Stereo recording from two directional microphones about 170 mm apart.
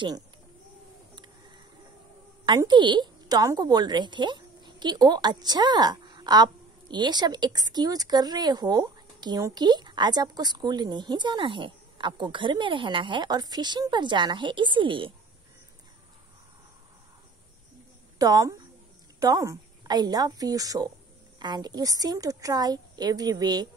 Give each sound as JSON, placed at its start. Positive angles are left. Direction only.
{"t": 2.4, "sound": "a woman's voice", "side_deg": -25}
{"t": 18.2, "sound": "a woman's voice", "side_deg": -20}